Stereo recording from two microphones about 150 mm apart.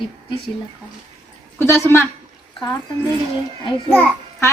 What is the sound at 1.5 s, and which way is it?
Speech, 15° left (ahead or behind).